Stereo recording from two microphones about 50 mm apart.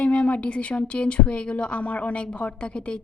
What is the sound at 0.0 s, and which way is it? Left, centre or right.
Speech, left.